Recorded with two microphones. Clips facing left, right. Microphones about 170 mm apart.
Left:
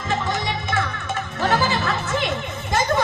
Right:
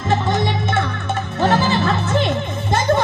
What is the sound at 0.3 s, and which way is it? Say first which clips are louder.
Music: right 5 dB; 25° right (ahead or behind).